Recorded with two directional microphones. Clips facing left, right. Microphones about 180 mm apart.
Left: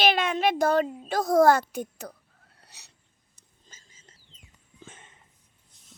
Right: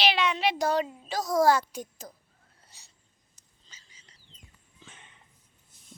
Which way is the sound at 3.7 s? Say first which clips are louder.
Left 3 dB; 50° left (ahead or behind).